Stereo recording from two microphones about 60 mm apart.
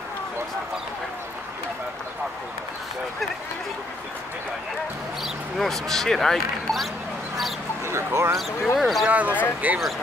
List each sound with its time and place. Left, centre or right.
5.2 s speech: centre
7.8 s speech: right
8.7 s speech: centre
9.0 s speech: right